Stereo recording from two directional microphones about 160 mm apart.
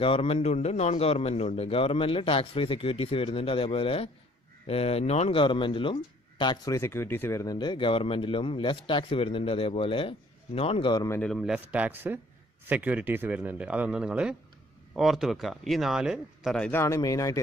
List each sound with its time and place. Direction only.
0.0 s speech: 35° left (ahead or behind)
11.1 s speech: 5° left (ahead or behind)
16.8 s speech: 20° left (ahead or behind)